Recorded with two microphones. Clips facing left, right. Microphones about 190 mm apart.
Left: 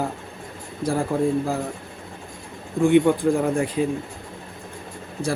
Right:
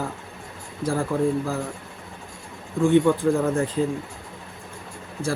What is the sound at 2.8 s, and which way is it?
Speech, 15° left (ahead or behind).